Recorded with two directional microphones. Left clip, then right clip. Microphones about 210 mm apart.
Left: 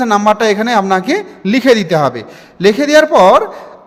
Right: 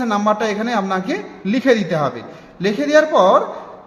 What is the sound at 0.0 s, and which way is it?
A man's voice, 40° left (ahead or behind).